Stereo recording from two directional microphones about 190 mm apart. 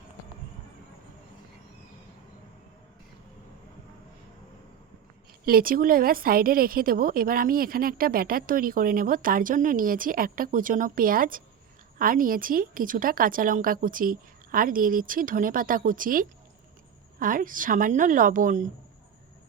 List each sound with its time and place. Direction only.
5.5 s a woman's voice: 50° right (ahead or behind)